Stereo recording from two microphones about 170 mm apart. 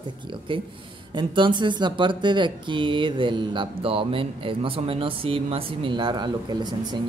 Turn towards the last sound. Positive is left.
turn(degrees=-25)  # may be behind; listen again after turning